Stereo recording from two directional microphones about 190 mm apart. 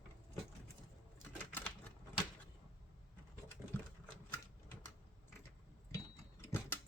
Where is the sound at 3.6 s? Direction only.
10° right (ahead or behind).